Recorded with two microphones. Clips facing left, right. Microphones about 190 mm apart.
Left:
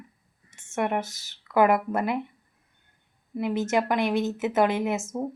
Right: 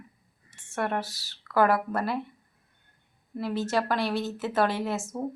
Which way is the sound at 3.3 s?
20° left (ahead or behind).